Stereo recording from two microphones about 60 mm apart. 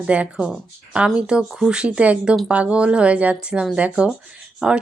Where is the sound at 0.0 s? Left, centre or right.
Centre.